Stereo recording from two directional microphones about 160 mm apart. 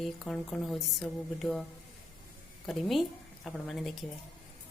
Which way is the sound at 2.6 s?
Centre (ahead or behind).